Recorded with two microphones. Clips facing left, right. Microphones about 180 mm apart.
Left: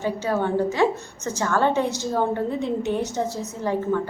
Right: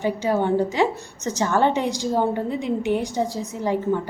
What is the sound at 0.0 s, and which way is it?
A woman's voice, 15° right (ahead or behind).